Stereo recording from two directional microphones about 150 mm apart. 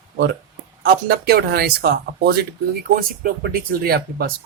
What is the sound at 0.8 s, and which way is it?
Speech, 90° right.